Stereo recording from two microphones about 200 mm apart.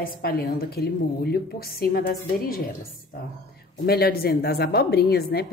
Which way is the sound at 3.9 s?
50° left (ahead or behind).